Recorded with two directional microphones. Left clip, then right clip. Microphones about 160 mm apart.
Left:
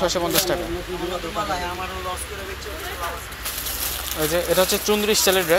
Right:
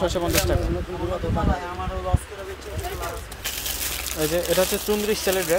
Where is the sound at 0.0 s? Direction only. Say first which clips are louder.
Left 2 dB; 20° right (ahead or behind).